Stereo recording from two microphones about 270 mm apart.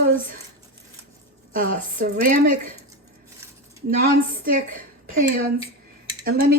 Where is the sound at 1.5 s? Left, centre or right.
Right.